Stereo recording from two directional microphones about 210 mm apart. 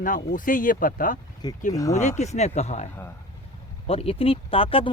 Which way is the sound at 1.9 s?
35° left (ahead or behind).